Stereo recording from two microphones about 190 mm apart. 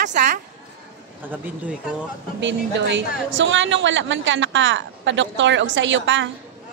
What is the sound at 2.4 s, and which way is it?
A woman's voice, 70° right (ahead or behind).